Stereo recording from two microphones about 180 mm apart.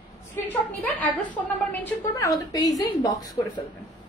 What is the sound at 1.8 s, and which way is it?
A woman's voice, 15° left (ahead or behind).